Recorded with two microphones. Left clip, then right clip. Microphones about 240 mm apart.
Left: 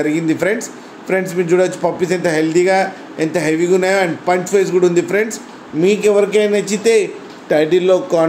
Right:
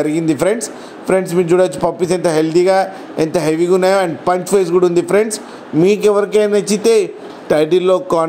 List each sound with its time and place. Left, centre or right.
0.0 s a man's voice: right